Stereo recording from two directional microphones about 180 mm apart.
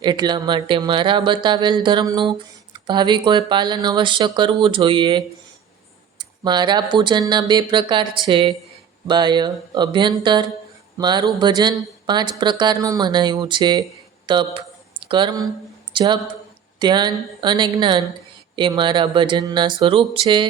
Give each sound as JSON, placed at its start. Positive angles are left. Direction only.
{"t": 0.0, "sound": "a woman's voice", "side_deg": -25}